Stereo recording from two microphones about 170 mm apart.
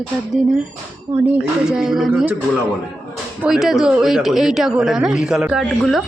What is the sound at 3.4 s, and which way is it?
Speech, 5° right (ahead or behind).